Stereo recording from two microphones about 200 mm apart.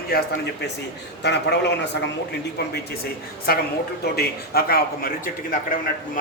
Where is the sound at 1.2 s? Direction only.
55° left (ahead or behind).